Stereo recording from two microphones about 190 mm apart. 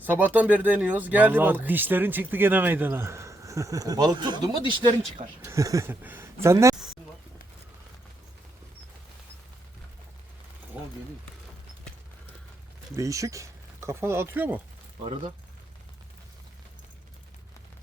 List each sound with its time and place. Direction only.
0.0 s speech: 10° right (ahead or behind)
10.8 s a sound: 5° right (ahead or behind)
13.0 s speech: 15° right (ahead or behind)